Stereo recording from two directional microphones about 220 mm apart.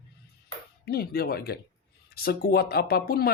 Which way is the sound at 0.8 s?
45° left (ahead or behind).